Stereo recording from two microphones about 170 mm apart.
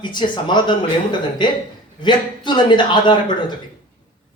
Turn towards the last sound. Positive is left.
turn(degrees=25)  # may be behind; listen again after turning